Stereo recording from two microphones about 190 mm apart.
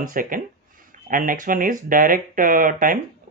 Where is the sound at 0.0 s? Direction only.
45° right (ahead or behind).